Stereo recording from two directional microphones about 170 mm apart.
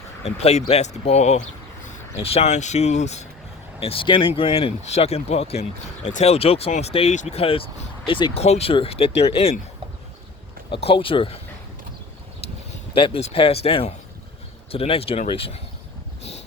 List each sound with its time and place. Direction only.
0.3 s speech: 40° left (ahead or behind)
10.7 s speech: 35° left (ahead or behind)
12.9 s speech: 35° left (ahead or behind)